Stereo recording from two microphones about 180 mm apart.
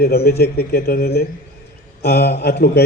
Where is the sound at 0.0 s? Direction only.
60° left (ahead or behind).